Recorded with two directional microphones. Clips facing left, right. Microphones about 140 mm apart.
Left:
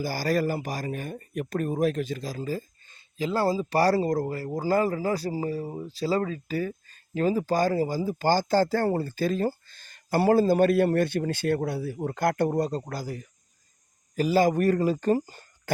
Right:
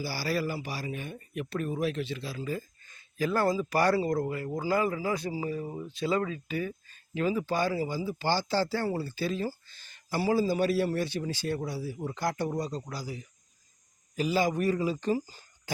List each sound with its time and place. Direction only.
0.0 s speech: 45° left (ahead or behind)